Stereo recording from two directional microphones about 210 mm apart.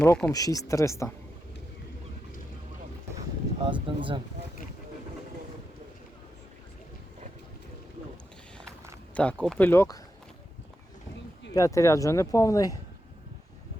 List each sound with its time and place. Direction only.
0.0 s speech: 5° left (ahead or behind)
3.6 s speech: 25° right (ahead or behind)
9.1 s speech: 5° left (ahead or behind)
11.5 s speech: 15° left (ahead or behind)